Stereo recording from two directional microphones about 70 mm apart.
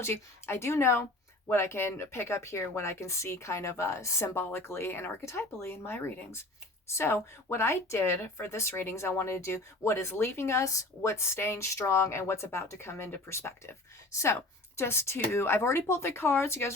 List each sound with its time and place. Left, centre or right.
0.0 s speech: left